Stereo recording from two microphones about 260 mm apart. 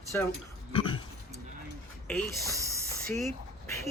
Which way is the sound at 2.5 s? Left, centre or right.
Centre.